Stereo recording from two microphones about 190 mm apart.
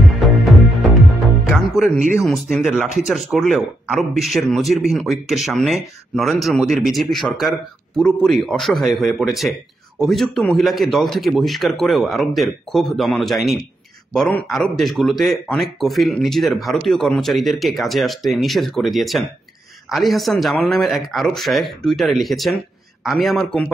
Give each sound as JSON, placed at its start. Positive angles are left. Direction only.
{"t": 0.2, "sound": "music", "side_deg": 0}
{"t": 2.5, "sound": "speech", "side_deg": 0}